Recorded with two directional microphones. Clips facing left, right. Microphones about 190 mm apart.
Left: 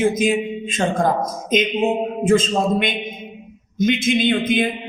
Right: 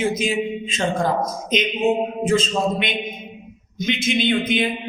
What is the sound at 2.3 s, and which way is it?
A man's voice, 50° left (ahead or behind).